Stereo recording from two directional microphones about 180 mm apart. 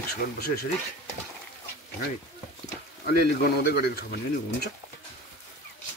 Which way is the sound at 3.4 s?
60° left (ahead or behind).